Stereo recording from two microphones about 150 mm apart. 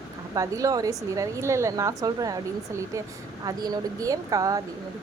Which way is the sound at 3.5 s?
25° right (ahead or behind).